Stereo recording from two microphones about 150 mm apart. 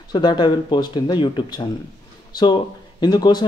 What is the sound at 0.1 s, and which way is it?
Speech, 30° left (ahead or behind).